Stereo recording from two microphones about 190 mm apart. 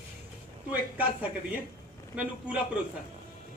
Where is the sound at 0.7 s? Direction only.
10° right (ahead or behind).